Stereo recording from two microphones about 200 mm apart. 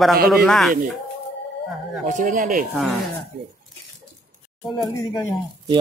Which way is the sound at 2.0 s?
40° right (ahead or behind).